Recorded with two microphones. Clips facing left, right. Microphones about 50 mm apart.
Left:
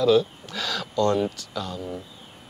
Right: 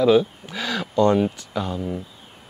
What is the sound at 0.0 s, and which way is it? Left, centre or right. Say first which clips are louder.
Speech: right 3 dB; centre.